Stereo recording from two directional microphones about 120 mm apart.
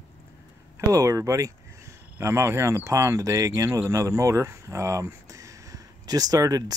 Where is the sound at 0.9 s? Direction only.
25° right (ahead or behind).